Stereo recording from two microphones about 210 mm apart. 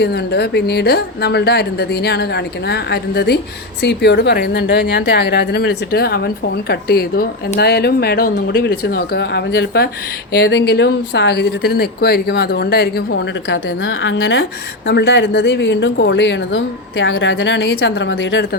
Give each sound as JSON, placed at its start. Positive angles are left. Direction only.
{"t": 0.0, "sound": "a woman's voice", "side_deg": 50}